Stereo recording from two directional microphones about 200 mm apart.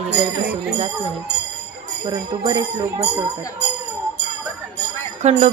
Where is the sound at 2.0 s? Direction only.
20° right (ahead or behind).